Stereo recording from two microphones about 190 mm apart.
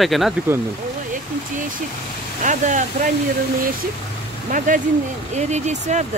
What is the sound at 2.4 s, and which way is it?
Speech, 40° right (ahead or behind).